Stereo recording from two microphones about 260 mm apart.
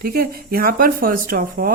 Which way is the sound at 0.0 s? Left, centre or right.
Right.